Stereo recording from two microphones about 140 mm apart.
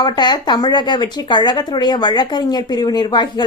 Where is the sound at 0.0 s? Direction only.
30° left (ahead or behind).